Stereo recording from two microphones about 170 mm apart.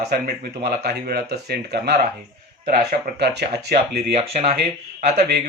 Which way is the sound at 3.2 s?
75° right (ahead or behind).